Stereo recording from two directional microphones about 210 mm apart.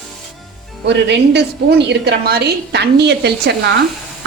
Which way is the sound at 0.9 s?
55° right (ahead or behind).